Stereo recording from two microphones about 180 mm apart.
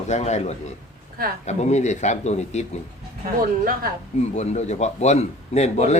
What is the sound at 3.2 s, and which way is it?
Speech, 55° right (ahead or behind).